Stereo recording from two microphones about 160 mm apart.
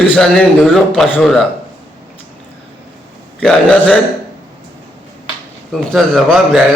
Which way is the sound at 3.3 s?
10° left (ahead or behind).